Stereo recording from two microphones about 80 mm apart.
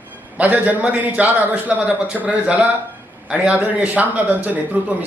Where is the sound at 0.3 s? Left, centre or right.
Centre.